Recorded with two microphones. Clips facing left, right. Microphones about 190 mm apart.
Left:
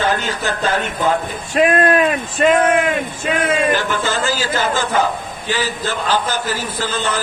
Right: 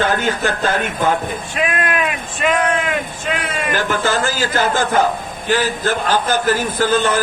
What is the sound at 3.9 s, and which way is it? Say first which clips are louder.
A man's voice: right 1 dB; 50° right (ahead or behind).